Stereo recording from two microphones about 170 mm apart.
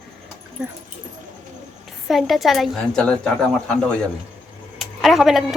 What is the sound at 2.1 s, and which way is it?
A man's voice, centre (ahead or behind).